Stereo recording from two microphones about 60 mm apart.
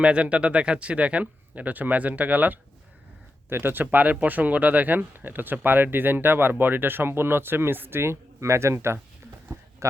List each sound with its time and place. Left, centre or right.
0.0 s speech: centre; by 9.0 s right